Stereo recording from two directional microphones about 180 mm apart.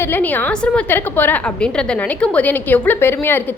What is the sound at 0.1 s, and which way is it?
A woman's voice, 10° left (ahead or behind).